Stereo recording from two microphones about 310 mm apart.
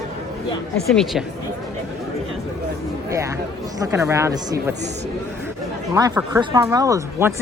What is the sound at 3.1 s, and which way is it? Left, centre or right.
Speech, centre.